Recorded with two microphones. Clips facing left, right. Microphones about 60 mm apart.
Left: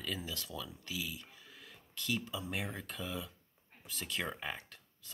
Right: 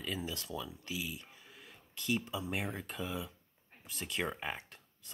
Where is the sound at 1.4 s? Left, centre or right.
Centre.